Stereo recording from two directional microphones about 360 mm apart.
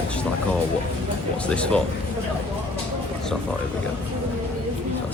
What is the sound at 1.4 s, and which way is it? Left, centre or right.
Speech, centre.